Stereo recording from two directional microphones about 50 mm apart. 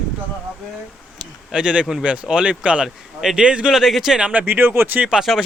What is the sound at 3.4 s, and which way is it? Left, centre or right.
Speech, right.